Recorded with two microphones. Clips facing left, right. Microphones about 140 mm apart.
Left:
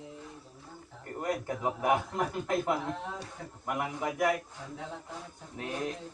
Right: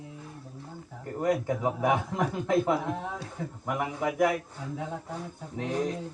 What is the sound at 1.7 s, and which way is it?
A man's voice, centre (ahead or behind).